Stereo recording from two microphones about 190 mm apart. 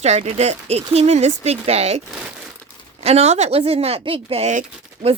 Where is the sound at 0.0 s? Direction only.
35° right (ahead or behind).